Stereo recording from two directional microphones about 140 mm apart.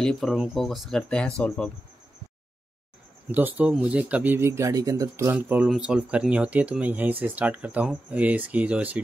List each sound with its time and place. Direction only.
0.0 s speech: centre (ahead or behind)
3.3 s speech: 15° right (ahead or behind)